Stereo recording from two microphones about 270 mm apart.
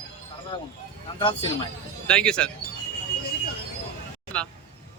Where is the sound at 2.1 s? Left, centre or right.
Centre.